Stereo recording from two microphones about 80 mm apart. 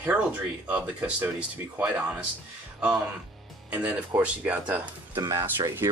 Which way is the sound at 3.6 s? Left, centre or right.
Centre.